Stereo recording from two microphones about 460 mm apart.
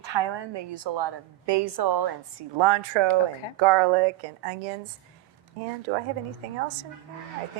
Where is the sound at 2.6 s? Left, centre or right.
Right.